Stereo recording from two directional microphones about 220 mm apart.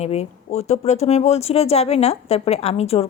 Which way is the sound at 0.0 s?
30° left (ahead or behind).